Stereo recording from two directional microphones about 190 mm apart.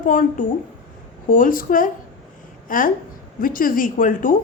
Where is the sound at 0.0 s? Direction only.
45° left (ahead or behind).